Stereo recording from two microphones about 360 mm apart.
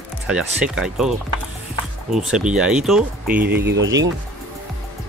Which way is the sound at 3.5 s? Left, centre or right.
Right.